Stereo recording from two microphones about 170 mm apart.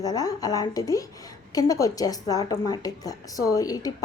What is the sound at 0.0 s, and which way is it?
A woman's voice, 20° left (ahead or behind).